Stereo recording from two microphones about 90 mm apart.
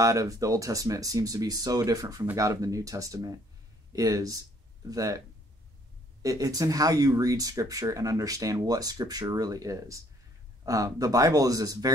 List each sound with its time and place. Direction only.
0.0 s speech: 40° right (ahead or behind)
6.2 s speech: 40° right (ahead or behind)